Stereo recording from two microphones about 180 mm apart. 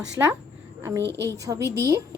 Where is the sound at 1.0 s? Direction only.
75° right (ahead or behind).